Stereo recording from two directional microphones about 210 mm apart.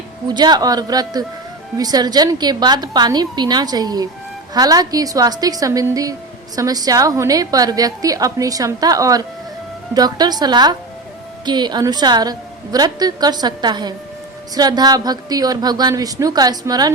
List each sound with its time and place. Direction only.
0.3 s a woman's voice: 20° right (ahead or behind)